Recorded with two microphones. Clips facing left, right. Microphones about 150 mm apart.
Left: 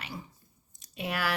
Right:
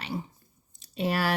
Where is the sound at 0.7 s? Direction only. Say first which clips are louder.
Right 6 dB; 30° right (ahead or behind).